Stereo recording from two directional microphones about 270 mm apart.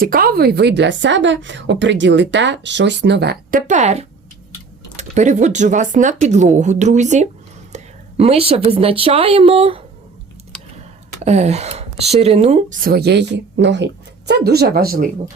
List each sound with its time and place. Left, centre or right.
0.0 s a woman's voice: right
7.7 s a sound: right
8.2 s speech: right
11.2 s a woman's voice: right